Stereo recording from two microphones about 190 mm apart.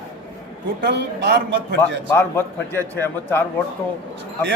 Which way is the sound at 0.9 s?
60° right (ahead or behind).